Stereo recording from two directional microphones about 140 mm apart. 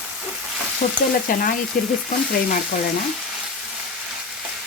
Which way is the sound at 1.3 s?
80° left.